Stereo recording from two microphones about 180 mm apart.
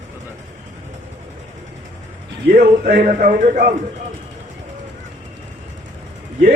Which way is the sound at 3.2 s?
45° right (ahead or behind).